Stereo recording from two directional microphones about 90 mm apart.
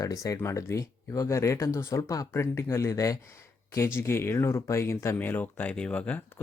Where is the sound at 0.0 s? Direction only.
40° left (ahead or behind).